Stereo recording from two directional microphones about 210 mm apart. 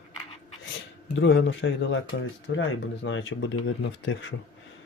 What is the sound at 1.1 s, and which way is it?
Speech, 60° left (ahead or behind).